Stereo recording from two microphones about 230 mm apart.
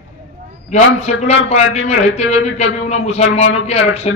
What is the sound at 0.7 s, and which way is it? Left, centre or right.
A man's voice, left.